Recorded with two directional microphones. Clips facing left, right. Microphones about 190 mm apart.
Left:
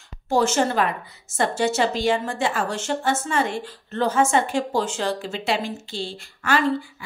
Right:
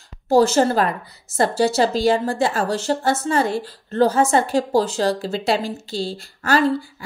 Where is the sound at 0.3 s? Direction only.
35° right (ahead or behind).